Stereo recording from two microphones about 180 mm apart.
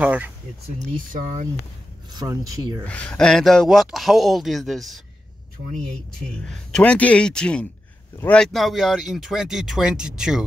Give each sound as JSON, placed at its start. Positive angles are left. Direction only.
{"t": 0.0, "sound": "speech", "side_deg": -10}
{"t": 0.9, "sound": "speech", "side_deg": -45}
{"t": 2.1, "sound": "speech", "side_deg": -20}
{"t": 2.8, "sound": "a man's voice", "side_deg": 5}
{"t": 6.1, "sound": "a man's voice", "side_deg": 5}